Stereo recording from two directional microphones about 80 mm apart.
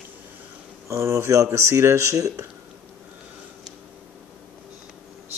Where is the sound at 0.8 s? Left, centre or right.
Right.